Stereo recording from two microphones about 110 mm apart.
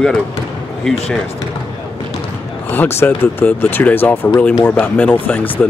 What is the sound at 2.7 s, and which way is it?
Speech, 20° left (ahead or behind).